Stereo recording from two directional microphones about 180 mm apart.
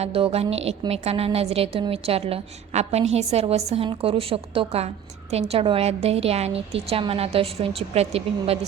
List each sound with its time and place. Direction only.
0.0 s a woman's voice: 35° right (ahead or behind)